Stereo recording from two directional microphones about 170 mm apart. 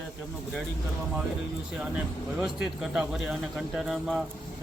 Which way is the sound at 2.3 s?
5° right (ahead or behind).